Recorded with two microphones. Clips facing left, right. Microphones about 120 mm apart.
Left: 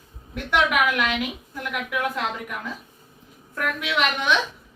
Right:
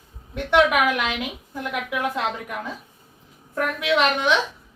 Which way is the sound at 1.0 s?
25° right (ahead or behind).